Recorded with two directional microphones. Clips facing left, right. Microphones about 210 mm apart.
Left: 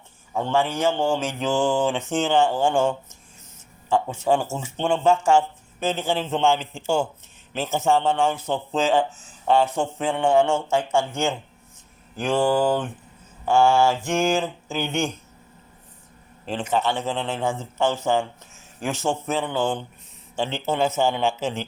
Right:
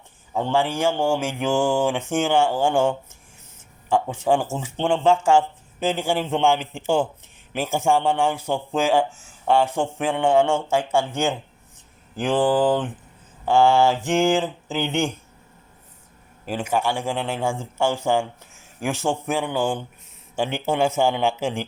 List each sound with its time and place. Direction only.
0.3 s speech: 15° right (ahead or behind)
16.5 s speech: 10° right (ahead or behind)